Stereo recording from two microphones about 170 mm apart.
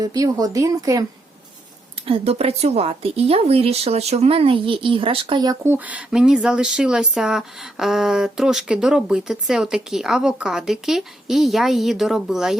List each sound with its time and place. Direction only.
0.0 s speech: 20° right (ahead or behind)
2.0 s speech: 30° right (ahead or behind); by 12.5 s centre (ahead or behind)